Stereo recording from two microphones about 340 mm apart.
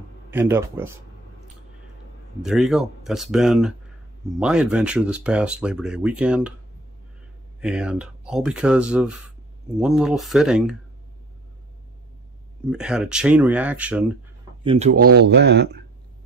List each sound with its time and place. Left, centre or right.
0.3 s speech: centre
2.4 s speech: centre
7.6 s speech: centre
12.6 s speech: centre
14.6 s speech: centre